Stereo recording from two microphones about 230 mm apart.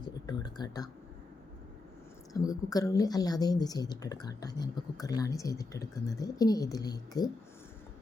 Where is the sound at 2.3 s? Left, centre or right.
Centre.